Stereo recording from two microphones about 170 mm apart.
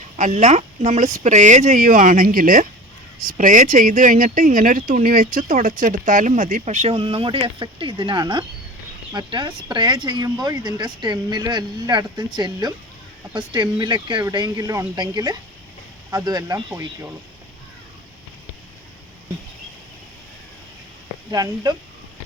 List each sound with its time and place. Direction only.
0.2 s speech: 45° right (ahead or behind); by 17.1 s 15° right (ahead or behind)
21.2 s speech: 20° right (ahead or behind)